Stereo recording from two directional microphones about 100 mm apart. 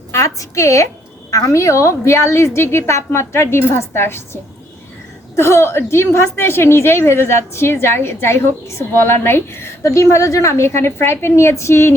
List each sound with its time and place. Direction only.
0.1 s a woman's voice: 30° left (ahead or behind)